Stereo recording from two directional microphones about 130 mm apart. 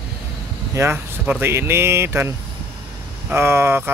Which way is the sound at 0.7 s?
15° right (ahead or behind).